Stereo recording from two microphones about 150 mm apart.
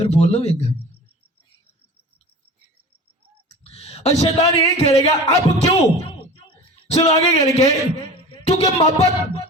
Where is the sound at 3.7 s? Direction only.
45° left (ahead or behind).